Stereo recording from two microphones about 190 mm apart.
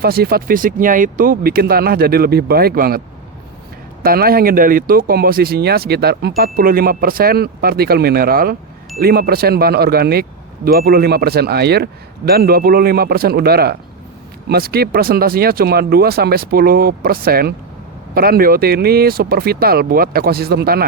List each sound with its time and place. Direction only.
0.0 s speech: 55° right (ahead or behind)
4.0 s speech: 50° right (ahead or behind)